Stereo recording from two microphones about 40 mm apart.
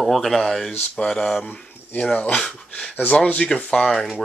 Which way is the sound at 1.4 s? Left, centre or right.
Left.